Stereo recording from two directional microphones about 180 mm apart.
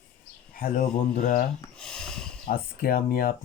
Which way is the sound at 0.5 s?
45° left (ahead or behind).